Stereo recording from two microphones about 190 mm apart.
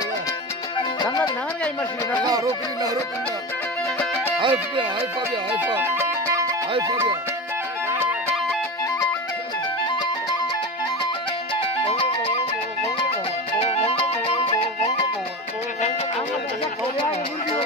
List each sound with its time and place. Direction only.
0.9 s music: 20° left (ahead or behind)
2.2 s music: 20° right (ahead or behind)
4.0 s music: 10° left (ahead or behind)
4.4 s speech: 25° right (ahead or behind)
5.8 s music: 15° right (ahead or behind)
6.7 s speech: 25° right (ahead or behind)
11.6 s music: 30° left (ahead or behind)
13.7 s music: 30° left (ahead or behind)